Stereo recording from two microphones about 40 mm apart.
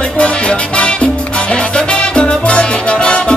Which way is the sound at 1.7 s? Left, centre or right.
Left.